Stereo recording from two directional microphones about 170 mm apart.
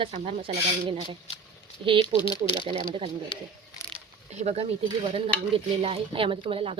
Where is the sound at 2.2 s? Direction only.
25° left (ahead or behind).